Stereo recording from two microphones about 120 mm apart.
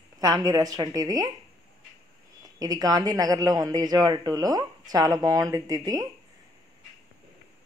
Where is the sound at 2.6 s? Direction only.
30° right (ahead or behind).